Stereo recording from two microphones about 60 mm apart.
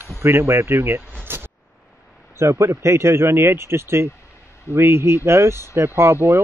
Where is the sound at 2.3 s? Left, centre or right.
Right.